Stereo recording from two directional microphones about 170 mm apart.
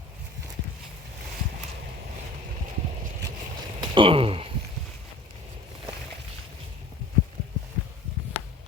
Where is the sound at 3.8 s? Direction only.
30° right (ahead or behind).